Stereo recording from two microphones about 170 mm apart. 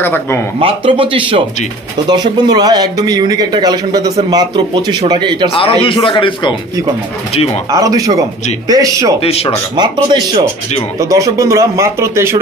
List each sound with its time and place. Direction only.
0.0 s speech: 10° left (ahead or behind)
0.6 s a man's voice: 30° right (ahead or behind)
5.5 s a man's voice: 30° left (ahead or behind)
7.7 s speech: 20° right (ahead or behind)
9.2 s a man's voice: 35° left (ahead or behind)
9.8 s speech: 25° right (ahead or behind)